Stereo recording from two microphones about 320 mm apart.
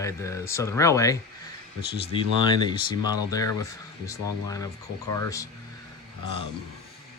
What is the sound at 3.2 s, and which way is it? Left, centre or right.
Speech, centre.